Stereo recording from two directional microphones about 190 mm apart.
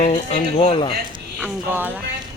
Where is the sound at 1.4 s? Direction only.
10° right (ahead or behind).